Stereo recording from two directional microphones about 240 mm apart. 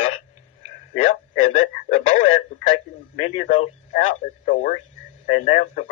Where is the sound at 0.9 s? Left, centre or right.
Left.